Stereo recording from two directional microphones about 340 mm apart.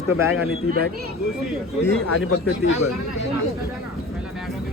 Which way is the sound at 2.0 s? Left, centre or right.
Left.